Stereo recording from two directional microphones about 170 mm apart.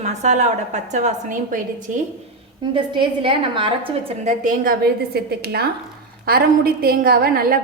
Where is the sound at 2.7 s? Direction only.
30° right (ahead or behind).